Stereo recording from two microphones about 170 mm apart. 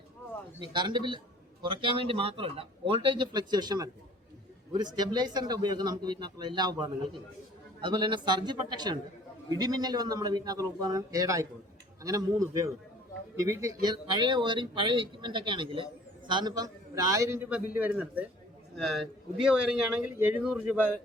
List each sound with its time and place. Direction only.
0.6 s a man's voice: 25° right (ahead or behind); by 20.8 s 5° right (ahead or behind)